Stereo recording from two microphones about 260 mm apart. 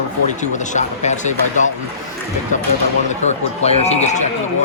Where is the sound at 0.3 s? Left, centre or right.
Left.